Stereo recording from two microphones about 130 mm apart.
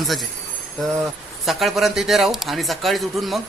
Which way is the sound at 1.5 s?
Centre (ahead or behind).